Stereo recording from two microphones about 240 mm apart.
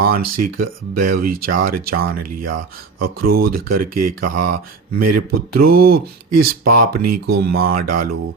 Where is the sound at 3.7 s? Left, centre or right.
Right.